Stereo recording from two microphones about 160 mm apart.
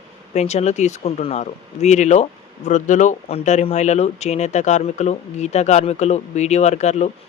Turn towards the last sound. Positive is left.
turn(degrees=45)  # may be behind; listen again after turning